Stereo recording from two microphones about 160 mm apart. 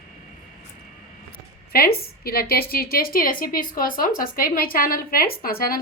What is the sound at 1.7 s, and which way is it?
A woman's voice, 70° left (ahead or behind).